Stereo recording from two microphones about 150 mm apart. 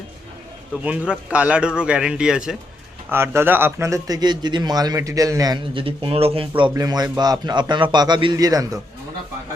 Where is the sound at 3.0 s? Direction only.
15° right (ahead or behind).